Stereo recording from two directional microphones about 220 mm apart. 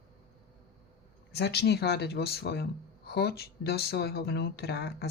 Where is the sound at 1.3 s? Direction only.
50° left (ahead or behind).